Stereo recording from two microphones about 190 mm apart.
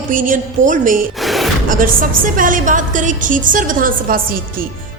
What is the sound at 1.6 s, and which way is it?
A woman's voice, 45° right (ahead or behind).